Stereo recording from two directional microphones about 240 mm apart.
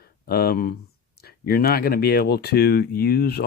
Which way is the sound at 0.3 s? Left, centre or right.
Left.